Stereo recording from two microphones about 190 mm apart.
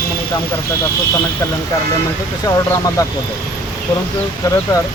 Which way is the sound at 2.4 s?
15° left (ahead or behind).